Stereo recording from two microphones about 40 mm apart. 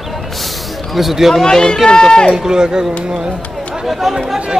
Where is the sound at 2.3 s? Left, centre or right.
Centre.